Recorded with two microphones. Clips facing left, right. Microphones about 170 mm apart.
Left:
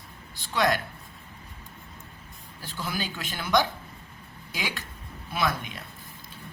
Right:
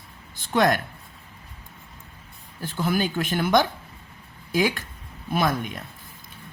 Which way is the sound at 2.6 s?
55° right (ahead or behind).